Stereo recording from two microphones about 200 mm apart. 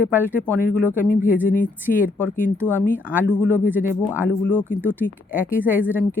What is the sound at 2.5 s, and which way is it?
Speech, 10° left (ahead or behind).